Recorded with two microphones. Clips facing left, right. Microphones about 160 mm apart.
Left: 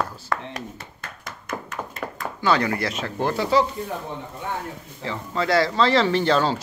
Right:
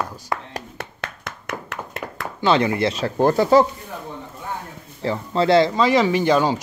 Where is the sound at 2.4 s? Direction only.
20° right (ahead or behind); by 3.6 s 45° right (ahead or behind).